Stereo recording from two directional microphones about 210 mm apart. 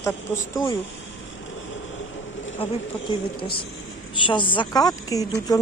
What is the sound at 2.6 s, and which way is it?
A woman's voice, 25° left (ahead or behind).